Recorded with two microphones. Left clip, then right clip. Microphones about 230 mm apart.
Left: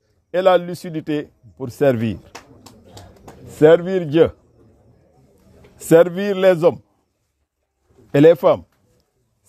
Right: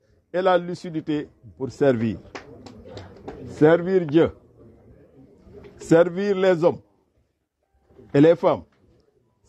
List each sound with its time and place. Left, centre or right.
0.3 s a man's voice: left
5.8 s a man's voice: left
8.1 s a man's voice: left